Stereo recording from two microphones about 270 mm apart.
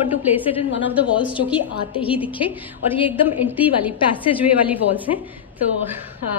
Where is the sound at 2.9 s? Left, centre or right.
Centre.